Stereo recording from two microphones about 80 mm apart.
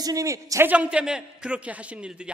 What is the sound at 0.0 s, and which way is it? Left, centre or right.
Speech, right.